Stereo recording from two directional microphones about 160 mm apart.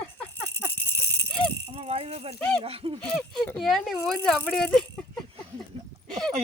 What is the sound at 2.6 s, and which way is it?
Speech, 35° right (ahead or behind).